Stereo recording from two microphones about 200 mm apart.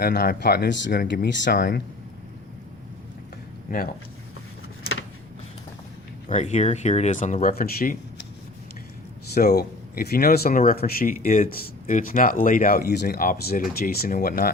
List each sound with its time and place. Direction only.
0.0 s speech: 50° left (ahead or behind)
1.5 s speech: 45° left (ahead or behind)
4.8 s vehicle: 90° left
6.2 s speech: 35° left (ahead or behind)
9.3 s speech: 50° left (ahead or behind)